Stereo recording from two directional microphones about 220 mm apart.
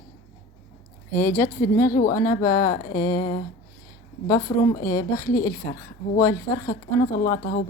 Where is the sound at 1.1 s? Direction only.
10° left (ahead or behind).